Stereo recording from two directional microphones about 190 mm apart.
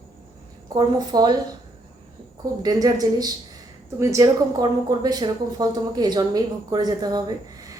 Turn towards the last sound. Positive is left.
turn(degrees=-20)  # may be behind; listen again after turning